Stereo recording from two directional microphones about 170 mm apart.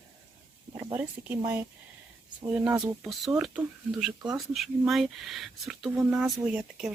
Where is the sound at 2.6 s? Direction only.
20° right (ahead or behind).